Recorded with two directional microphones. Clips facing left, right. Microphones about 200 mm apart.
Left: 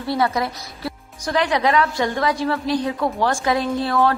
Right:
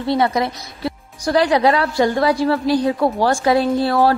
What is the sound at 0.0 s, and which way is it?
Speech, 20° right (ahead or behind).